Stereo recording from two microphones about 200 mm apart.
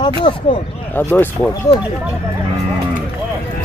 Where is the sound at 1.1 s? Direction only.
5° left (ahead or behind).